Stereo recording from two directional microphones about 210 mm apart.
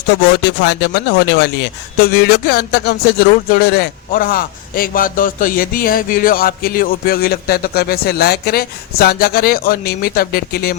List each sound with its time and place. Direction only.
0.4 s speech: 55° left (ahead or behind)